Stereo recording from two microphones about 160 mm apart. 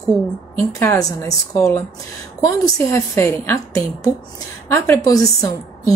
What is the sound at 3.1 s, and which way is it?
A woman's voice, 15° left (ahead or behind).